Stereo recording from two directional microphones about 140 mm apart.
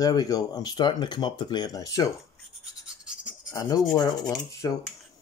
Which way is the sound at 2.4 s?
5° right (ahead or behind).